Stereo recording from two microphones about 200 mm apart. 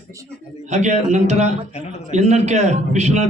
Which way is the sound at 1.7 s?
35° left (ahead or behind).